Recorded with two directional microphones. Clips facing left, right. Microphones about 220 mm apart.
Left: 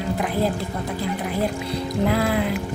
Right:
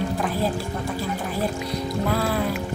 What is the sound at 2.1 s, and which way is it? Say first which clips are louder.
Music: left 3 dB; 15° left (ahead or behind).